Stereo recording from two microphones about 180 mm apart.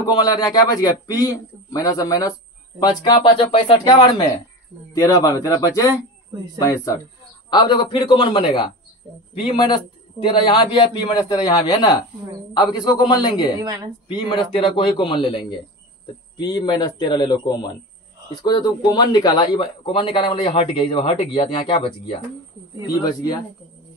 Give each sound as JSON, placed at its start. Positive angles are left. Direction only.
{"t": 0.1, "sound": "a man's voice", "side_deg": 20}
{"t": 13.6, "sound": "a woman's voice", "side_deg": -20}
{"t": 14.3, "sound": "a man's voice", "side_deg": 30}